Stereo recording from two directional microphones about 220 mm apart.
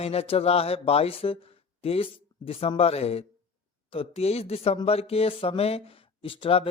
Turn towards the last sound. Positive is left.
turn(degrees=25)  # may be behind; listen again after turning